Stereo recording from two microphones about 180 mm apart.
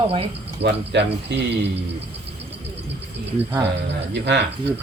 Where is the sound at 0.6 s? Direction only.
70° right (ahead or behind).